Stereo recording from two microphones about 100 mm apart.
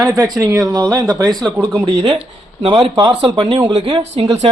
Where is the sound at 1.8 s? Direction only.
90° right.